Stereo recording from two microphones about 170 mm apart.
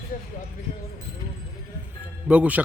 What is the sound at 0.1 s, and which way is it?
Speech, 50° left (ahead or behind).